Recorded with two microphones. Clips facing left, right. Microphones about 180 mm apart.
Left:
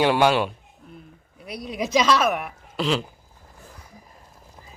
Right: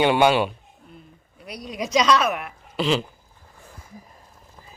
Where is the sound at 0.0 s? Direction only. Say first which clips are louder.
Right 1 dB; centre (ahead or behind).